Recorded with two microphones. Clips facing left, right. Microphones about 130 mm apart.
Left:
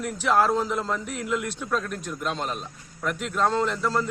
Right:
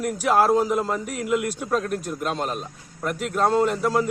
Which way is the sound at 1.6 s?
40° right (ahead or behind).